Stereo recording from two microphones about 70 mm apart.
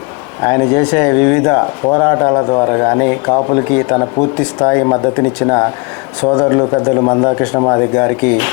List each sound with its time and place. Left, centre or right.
0.4 s speech: left